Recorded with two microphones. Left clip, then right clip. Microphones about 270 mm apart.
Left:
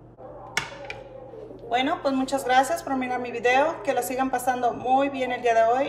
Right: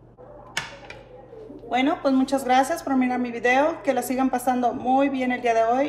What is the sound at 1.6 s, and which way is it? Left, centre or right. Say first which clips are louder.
Speech: right 2 dB; right.